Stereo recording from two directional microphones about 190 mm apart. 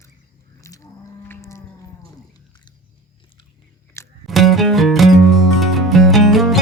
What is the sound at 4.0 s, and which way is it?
Music, 15° left (ahead or behind).